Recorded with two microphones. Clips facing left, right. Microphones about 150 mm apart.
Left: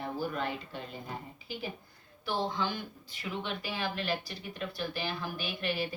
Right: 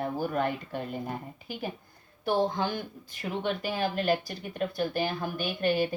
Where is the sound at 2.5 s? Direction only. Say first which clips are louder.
Right 4 dB; 50° right (ahead or behind).